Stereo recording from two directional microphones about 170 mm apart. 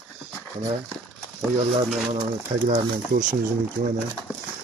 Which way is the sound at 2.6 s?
50° right (ahead or behind).